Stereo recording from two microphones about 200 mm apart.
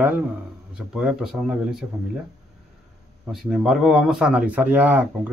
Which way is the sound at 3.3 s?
Centre (ahead or behind).